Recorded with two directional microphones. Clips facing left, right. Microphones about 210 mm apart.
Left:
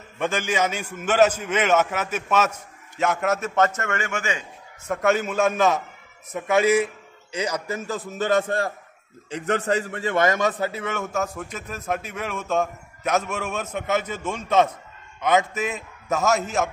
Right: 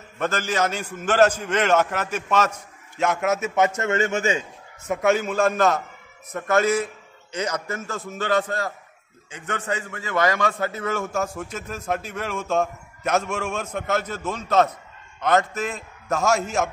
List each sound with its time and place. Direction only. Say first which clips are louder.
0.2 s a man's voice: even; 10° left (ahead or behind); by 4.1 s 20° right (ahead or behind)
4.8 s a man's voice: right 1 dB; centre (ahead or behind); by 8.0 s 15° left (ahead or behind)
8.5 s a man's voice: left 3 dB; 30° left (ahead or behind); by 16.6 s centre (ahead or behind)